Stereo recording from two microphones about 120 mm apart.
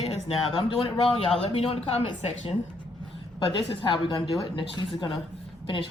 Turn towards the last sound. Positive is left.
turn(degrees=45)  # may be behind; listen again after turning